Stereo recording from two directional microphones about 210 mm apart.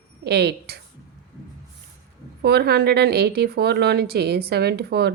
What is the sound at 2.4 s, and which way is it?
A woman's voice, 50° right (ahead or behind).